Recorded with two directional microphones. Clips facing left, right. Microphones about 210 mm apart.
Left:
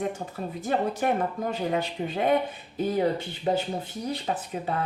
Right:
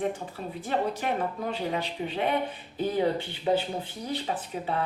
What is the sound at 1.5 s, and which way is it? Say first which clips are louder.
Speech: left 3 dB; 45° left (ahead or behind).